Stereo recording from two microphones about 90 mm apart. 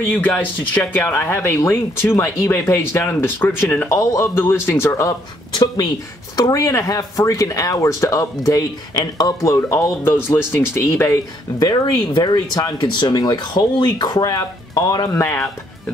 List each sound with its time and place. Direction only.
0.1 s speech: 20° left (ahead or behind)
3.9 s speech: 40° left (ahead or behind)
6.3 s speech: 45° left (ahead or behind)
11.6 s speech: 55° left (ahead or behind)